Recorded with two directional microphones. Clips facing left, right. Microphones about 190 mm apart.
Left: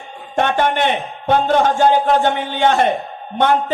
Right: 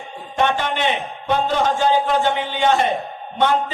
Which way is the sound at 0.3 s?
55° left (ahead or behind).